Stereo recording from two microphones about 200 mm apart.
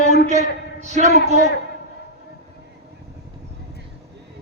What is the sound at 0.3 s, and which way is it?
A man's voice, 35° right (ahead or behind).